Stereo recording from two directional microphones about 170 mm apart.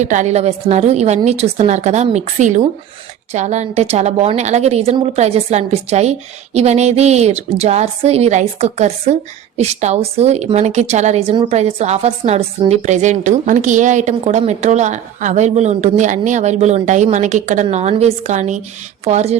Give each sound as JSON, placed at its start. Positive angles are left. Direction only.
{"t": 0.0, "sound": "a woman's voice", "side_deg": -45}